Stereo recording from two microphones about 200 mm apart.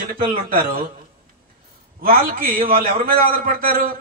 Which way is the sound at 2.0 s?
45° right (ahead or behind).